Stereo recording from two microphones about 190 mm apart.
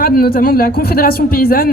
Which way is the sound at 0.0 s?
50° left (ahead or behind).